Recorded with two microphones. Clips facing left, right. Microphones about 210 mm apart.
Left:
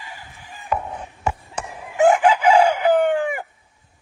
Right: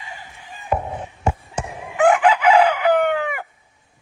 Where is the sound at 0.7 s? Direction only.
25° right (ahead or behind).